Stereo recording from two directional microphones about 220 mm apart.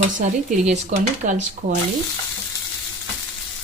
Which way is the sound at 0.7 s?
35° right (ahead or behind).